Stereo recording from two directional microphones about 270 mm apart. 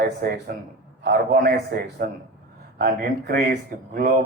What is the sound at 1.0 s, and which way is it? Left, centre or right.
A man's voice, right.